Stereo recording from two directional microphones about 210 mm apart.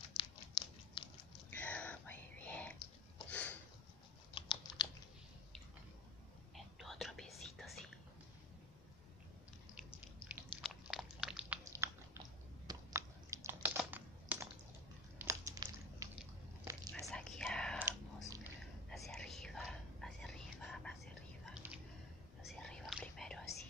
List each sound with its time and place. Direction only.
0.2 s a sound: 25° left (ahead or behind)
1.5 s whispering: 5° left (ahead or behind)
3.3 s a sound: 5° left (ahead or behind)
4.4 s computer keyboard: 25° left (ahead or behind)
6.5 s whispering: centre (ahead or behind)
10.2 s a sound: centre (ahead or behind)
12.6 s typing: 15° right (ahead or behind)
15.1 s crumpling: 15° right (ahead or behind)
16.7 s whispering: 15° right (ahead or behind)
17.0 s whispering: 5° left (ahead or behind)
17.7 s whispering: 10° right (ahead or behind)
18.9 s whispering: centre (ahead or behind)